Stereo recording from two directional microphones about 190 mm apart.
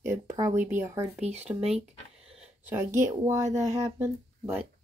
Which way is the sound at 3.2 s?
15° right (ahead or behind).